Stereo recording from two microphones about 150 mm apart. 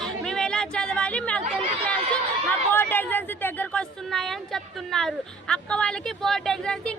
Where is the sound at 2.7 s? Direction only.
15° left (ahead or behind).